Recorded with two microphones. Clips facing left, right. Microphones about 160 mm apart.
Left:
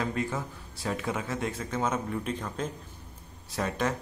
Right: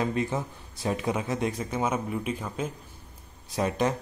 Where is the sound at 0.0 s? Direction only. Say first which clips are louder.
Right 3 dB; 20° right (ahead or behind).